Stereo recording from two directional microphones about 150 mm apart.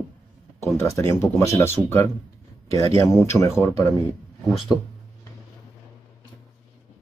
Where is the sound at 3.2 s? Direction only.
20° left (ahead or behind).